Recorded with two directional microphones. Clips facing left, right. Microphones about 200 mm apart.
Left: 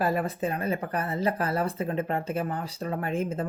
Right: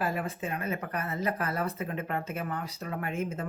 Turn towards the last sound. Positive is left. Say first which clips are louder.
# left 4 dB
turn(degrees=30)  # may be behind; listen again after turning